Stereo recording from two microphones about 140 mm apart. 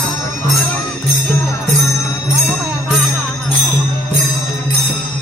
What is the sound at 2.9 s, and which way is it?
Music, centre (ahead or behind).